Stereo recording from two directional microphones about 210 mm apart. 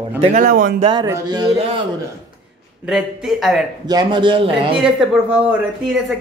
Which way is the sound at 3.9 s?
20° right (ahead or behind).